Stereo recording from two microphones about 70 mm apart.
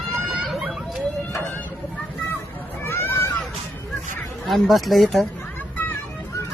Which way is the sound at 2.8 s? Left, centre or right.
Left.